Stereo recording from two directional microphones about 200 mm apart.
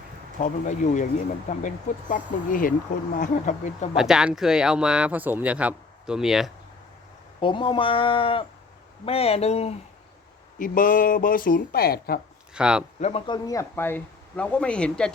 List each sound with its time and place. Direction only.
0.4 s speech: 40° left (ahead or behind)
3.9 s speech: centre (ahead or behind)
7.3 s speech: 25° left (ahead or behind)
10.6 s speech: 45° left (ahead or behind)
12.5 s speech: 5° right (ahead or behind)
13.0 s speech: 30° left (ahead or behind); by 15.1 s 5° left (ahead or behind)